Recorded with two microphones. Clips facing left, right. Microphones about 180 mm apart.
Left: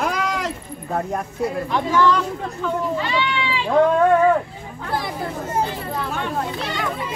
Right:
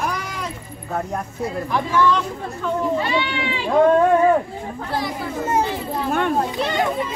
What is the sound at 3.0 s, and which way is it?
Speech, 40° right (ahead or behind).